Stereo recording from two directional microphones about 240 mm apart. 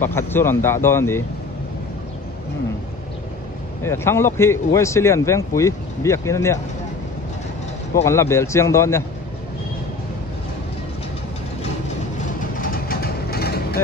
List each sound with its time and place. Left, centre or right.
0.0 s speech: centre
3.8 s speech: centre
7.9 s speech: centre
12.5 s vehicle: left